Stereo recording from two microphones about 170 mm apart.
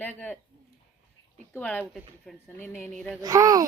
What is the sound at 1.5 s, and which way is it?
A woman's voice, 10° left (ahead or behind).